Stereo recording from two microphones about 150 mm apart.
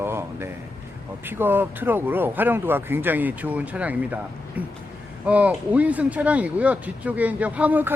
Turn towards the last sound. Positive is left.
turn(degrees=-10)  # may be behind; listen again after turning